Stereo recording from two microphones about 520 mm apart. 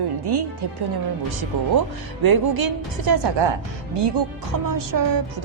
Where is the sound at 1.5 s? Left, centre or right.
Right.